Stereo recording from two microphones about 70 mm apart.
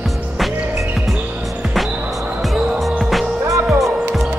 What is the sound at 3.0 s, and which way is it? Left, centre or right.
Music, centre.